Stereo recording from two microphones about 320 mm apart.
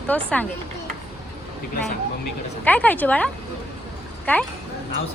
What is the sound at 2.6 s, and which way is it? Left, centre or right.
Speech, centre.